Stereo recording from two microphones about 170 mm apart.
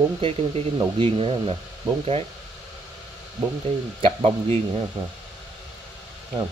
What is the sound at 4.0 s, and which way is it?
Speech, 35° right (ahead or behind).